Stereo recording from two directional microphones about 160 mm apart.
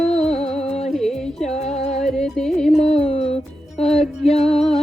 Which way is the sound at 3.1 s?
40° left (ahead or behind).